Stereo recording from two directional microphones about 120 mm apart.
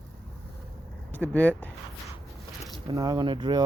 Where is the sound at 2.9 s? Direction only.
35° right (ahead or behind).